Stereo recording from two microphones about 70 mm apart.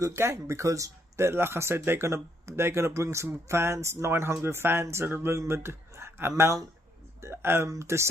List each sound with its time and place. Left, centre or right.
0.0 s speech: right